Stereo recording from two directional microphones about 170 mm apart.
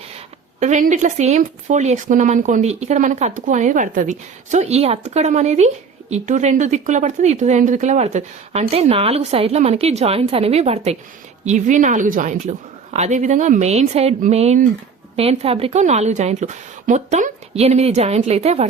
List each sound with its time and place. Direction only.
0.6 s a woman's voice: 45° right (ahead or behind)